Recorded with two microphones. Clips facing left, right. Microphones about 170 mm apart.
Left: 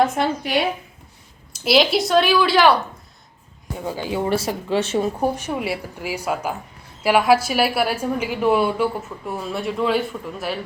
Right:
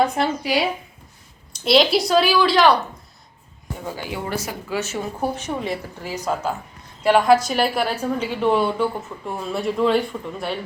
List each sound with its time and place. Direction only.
0.0 s a woman's voice: centre (ahead or behind)
3.8 s speech: 15° left (ahead or behind)
5.4 s a woman's voice: 10° left (ahead or behind)